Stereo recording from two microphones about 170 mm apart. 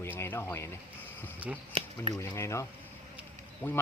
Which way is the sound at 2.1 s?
15° left (ahead or behind).